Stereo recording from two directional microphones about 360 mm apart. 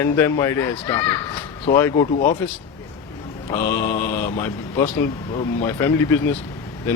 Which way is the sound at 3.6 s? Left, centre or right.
Left.